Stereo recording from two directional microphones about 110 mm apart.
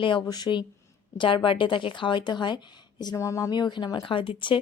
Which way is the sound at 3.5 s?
45° left (ahead or behind).